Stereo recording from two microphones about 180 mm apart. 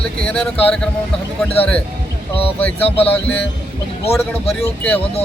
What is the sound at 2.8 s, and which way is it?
Speech, 35° left (ahead or behind).